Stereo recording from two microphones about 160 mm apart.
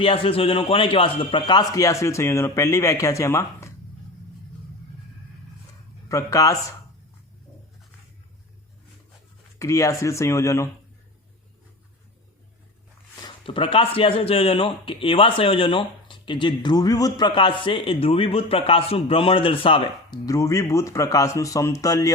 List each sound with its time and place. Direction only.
0.0 s a man's voice: 35° left (ahead or behind); by 3.7 s 15° left (ahead or behind)
6.1 s a man's voice: 20° left (ahead or behind)
9.6 s speech: 20° left (ahead or behind)
13.1 s speech: 30° left (ahead or behind)
20.2 s a man's voice: 20° left (ahead or behind)